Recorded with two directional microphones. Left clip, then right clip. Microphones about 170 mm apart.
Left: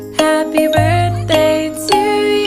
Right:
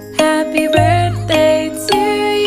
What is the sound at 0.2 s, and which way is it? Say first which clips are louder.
Music: left 1 dB; centre (ahead or behind).